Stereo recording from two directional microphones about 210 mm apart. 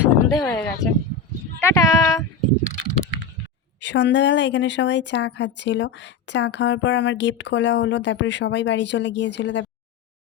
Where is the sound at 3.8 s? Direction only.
55° left (ahead or behind).